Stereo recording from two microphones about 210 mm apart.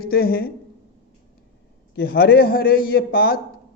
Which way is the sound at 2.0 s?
45° left (ahead or behind).